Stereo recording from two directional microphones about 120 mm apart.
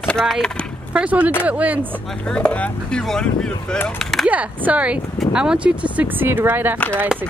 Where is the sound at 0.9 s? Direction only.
10° right (ahead or behind).